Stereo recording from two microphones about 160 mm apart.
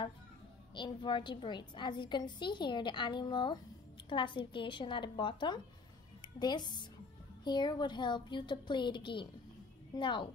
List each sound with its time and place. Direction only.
0.7 s a woman's voice: 30° left (ahead or behind)